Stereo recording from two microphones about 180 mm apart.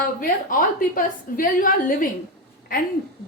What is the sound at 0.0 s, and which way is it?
A woman's voice, 50° left (ahead or behind).